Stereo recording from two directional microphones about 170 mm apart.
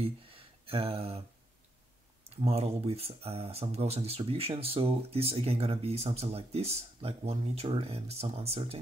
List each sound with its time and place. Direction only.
0.0 s speech: 35° right (ahead or behind)
2.2 s speech: 35° right (ahead or behind)